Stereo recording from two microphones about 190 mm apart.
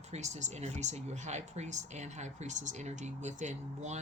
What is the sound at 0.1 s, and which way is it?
Speech, 40° right (ahead or behind).